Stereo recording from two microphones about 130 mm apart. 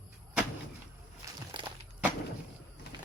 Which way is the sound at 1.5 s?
40° right (ahead or behind).